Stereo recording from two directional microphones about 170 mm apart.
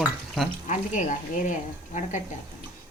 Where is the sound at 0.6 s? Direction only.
45° left (ahead or behind).